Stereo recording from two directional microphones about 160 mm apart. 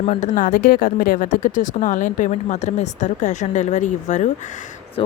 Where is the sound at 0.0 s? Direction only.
45° left (ahead or behind).